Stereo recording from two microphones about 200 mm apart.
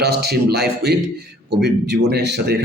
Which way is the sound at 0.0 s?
55° right (ahead or behind).